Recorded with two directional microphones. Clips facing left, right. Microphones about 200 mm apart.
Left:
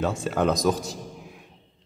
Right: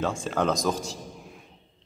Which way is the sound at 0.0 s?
5° left (ahead or behind).